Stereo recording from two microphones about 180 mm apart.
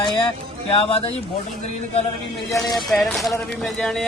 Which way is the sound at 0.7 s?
30° left (ahead or behind).